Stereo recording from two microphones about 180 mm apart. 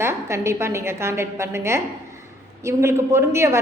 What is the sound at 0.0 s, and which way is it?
A woman's voice, 15° right (ahead or behind).